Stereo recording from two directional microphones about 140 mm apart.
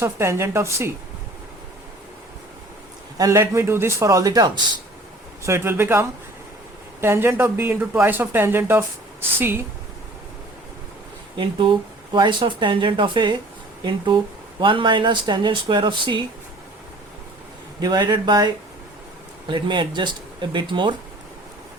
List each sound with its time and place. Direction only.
0.0 s a man's voice: 20° right (ahead or behind)
3.2 s a man's voice: 25° right (ahead or behind)
5.4 s speech: 20° right (ahead or behind)
11.3 s speech: 35° right (ahead or behind)
17.7 s a man's voice: 30° right (ahead or behind)